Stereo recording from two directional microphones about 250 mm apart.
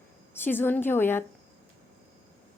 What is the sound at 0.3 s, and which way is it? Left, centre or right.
Speech, centre.